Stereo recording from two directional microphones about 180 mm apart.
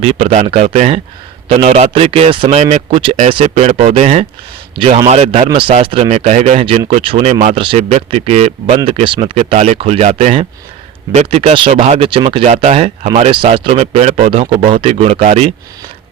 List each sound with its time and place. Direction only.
0.0 s a man's voice: 35° right (ahead or behind)